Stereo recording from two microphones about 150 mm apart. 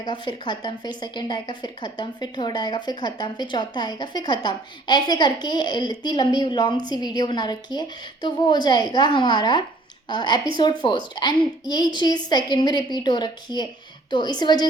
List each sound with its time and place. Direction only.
0.0 s a woman's voice: 30° left (ahead or behind)